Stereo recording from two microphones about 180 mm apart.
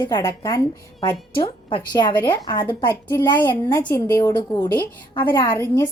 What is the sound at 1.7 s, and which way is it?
A woman's voice, 25° left (ahead or behind).